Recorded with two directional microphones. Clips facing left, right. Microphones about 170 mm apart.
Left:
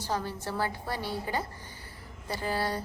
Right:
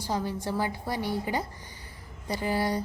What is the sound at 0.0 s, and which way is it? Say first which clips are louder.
A woman's voice: right 2 dB; 15° right (ahead or behind).